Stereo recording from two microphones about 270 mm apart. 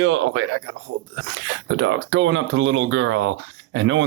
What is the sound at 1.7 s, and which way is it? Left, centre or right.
Speech, right.